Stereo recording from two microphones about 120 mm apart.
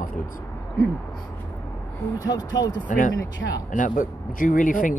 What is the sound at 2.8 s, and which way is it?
Speech, 90° left.